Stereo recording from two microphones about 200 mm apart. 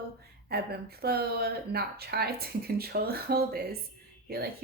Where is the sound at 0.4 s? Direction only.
50° right (ahead or behind).